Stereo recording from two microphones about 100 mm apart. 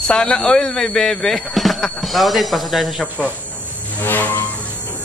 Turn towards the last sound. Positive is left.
turn(degrees=15)  # may be behind; listen again after turning